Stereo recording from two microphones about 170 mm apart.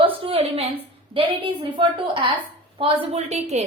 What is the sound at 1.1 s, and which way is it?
A woman's voice, 30° right (ahead or behind).